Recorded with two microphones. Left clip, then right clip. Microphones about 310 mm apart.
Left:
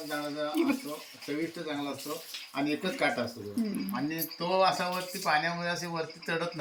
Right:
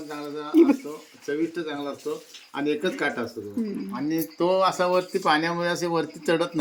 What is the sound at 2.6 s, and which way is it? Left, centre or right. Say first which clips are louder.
Speech: right 5 dB; centre.